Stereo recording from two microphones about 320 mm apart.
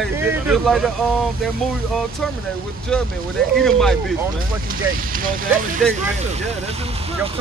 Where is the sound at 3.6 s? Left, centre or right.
Centre.